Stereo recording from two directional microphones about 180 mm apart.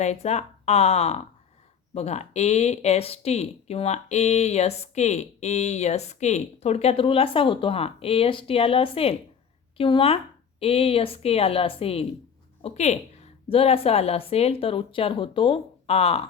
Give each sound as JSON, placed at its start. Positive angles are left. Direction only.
{"t": 0.0, "sound": "speech", "side_deg": 40}